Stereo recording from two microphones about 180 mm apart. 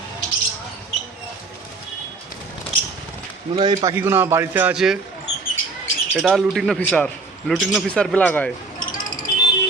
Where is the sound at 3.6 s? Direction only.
25° right (ahead or behind).